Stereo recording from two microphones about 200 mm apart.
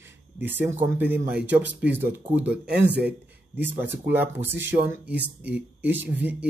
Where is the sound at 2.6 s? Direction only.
55° right (ahead or behind).